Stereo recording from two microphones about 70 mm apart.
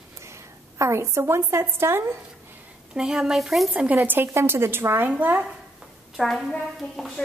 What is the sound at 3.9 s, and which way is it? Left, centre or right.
Speech, right.